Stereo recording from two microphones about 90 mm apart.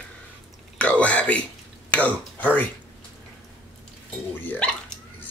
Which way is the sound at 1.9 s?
15° left (ahead or behind).